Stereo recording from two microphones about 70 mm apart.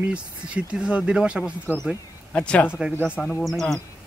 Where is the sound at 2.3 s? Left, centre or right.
Centre.